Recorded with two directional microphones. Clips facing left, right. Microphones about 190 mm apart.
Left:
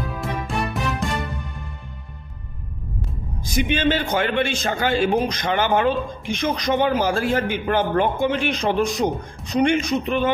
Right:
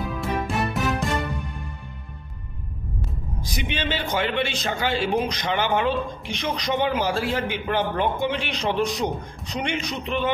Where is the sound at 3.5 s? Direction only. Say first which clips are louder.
Left 8 dB; 50° left (ahead or behind).